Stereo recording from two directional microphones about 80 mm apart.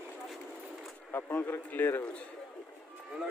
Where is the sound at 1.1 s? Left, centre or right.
Left.